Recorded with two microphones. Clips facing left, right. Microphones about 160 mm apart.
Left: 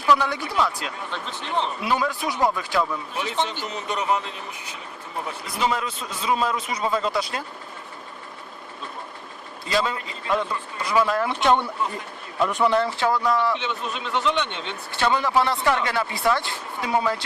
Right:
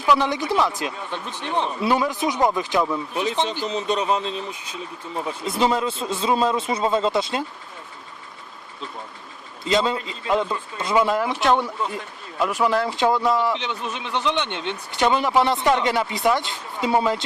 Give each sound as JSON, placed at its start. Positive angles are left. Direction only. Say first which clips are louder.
{"t": 0.0, "sound": "speech", "louder": "right 1 dB", "side_deg": -20}
{"t": 9.6, "sound": "speech", "louder": "right 4 dB", "side_deg": -25}
{"t": 11.3, "sound": "speech", "louder": "even", "side_deg": 0}
{"t": 12.9, "sound": "speech", "louder": "right 2 dB", "side_deg": -20}